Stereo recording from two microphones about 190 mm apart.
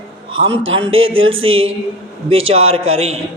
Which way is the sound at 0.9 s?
90° right.